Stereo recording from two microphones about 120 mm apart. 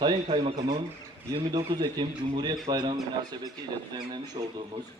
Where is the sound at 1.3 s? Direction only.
40° right (ahead or behind).